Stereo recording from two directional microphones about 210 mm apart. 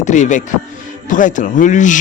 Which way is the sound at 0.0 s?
35° left (ahead or behind).